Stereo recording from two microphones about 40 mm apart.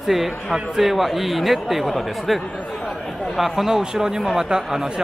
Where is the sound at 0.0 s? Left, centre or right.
Centre.